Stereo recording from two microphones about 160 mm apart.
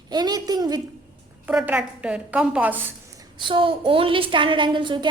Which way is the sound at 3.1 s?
30° right (ahead or behind).